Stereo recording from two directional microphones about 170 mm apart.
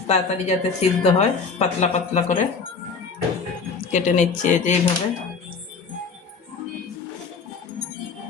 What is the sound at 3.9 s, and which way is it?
Speech, 45° left (ahead or behind).